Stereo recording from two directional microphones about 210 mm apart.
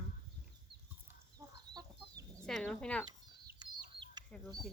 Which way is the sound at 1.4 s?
15° right (ahead or behind).